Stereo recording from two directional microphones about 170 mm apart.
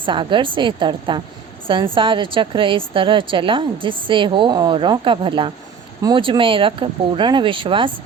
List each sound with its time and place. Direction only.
0.0 s a woman's voice: 30° right (ahead or behind)